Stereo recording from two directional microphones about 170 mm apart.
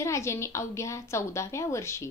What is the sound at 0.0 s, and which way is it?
A woman's voice, 15° left (ahead or behind).